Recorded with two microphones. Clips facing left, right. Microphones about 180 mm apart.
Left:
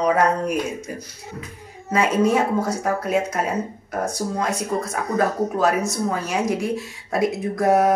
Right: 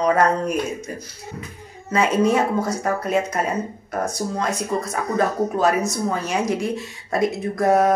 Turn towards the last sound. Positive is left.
turn(degrees=10)  # may be behind; listen again after turning